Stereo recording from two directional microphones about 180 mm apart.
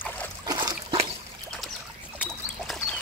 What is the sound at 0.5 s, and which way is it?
Dog, 20° right (ahead or behind).